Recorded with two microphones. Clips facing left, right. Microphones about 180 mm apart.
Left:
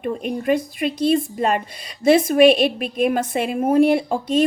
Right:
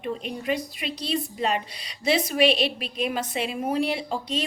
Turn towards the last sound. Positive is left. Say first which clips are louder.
# left 10 dB
turn(degrees=50)  # may be behind; listen again after turning